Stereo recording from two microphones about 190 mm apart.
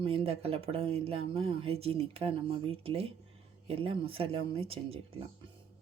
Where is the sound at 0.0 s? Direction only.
30° right (ahead or behind).